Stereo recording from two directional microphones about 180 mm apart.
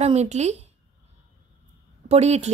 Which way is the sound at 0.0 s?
40° right (ahead or behind).